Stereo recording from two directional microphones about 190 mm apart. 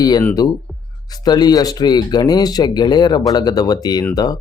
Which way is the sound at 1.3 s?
20° left (ahead or behind).